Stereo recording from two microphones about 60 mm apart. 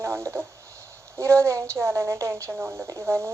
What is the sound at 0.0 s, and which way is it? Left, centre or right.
Speech, right.